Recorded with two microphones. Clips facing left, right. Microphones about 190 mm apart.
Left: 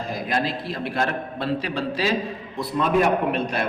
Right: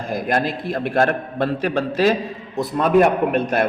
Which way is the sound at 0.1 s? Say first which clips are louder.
Right 5 dB; 50° right (ahead or behind).